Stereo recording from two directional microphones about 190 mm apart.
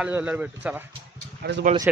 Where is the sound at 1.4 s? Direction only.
60° right (ahead or behind).